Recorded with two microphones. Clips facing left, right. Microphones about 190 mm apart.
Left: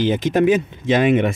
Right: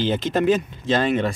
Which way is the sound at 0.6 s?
20° left (ahead or behind).